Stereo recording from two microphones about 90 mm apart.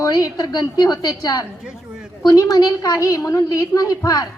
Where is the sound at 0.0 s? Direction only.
45° left (ahead or behind).